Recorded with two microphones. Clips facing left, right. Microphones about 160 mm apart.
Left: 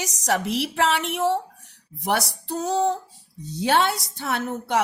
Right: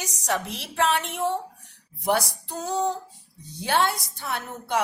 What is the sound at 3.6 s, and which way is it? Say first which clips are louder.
A woman's voice: left 3 dB; 75° left (ahead or behind).